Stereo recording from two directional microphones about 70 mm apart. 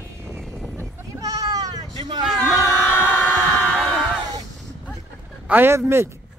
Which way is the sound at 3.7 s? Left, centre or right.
Centre.